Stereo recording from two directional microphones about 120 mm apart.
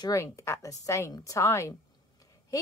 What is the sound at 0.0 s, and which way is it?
A woman's voice, 25° left (ahead or behind).